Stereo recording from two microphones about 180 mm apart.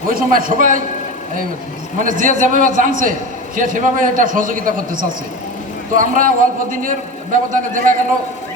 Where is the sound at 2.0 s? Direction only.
45° right (ahead or behind).